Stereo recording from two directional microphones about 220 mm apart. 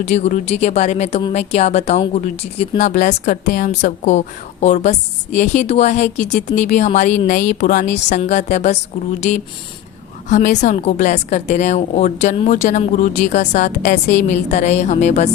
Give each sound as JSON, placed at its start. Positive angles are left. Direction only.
{"t": 0.0, "sound": "a woman's voice", "side_deg": 30}
{"t": 10.2, "sound": "a woman's voice", "side_deg": 35}